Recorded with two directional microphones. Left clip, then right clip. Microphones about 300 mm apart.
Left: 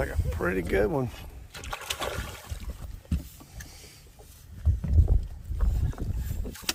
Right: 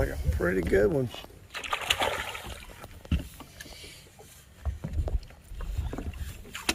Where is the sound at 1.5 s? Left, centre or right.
Centre.